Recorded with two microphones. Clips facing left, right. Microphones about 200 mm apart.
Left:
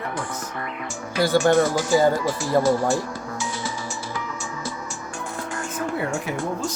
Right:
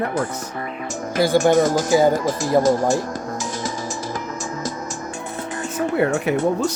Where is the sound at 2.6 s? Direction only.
40° right (ahead or behind).